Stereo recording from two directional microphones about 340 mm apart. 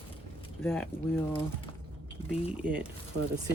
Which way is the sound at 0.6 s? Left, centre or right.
Centre.